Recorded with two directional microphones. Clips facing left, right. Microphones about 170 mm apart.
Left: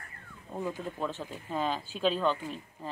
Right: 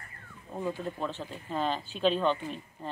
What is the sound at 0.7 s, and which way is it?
Speech, 10° left (ahead or behind).